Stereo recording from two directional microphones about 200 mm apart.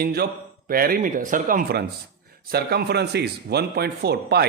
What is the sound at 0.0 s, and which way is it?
Speech, 50° right (ahead or behind).